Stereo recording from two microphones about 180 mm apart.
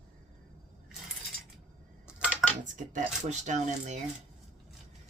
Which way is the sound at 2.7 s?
45° right (ahead or behind).